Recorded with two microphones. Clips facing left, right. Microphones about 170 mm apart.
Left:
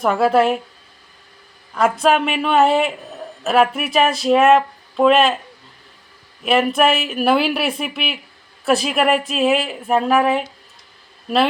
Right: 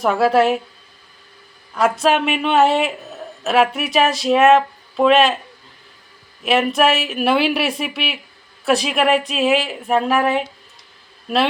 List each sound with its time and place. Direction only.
0.0 s speech: centre (ahead or behind)
1.7 s speech: centre (ahead or behind)
6.4 s speech: centre (ahead or behind)